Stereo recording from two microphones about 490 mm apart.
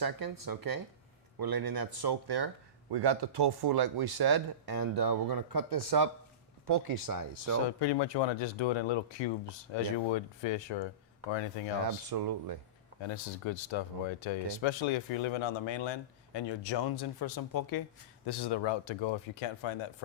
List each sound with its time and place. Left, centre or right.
0.0 s speech: right
7.8 s speech: left
11.8 s speech: right
13.1 s speech: left